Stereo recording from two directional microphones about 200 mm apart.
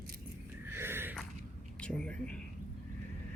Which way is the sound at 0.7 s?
10° right (ahead or behind).